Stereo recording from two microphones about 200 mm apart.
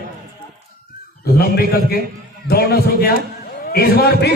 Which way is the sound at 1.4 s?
50° left (ahead or behind).